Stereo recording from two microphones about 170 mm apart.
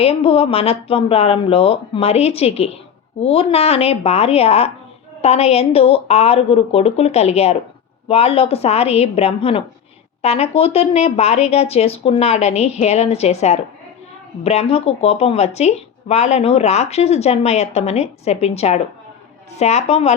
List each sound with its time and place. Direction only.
0.0 s speech: 35° left (ahead or behind)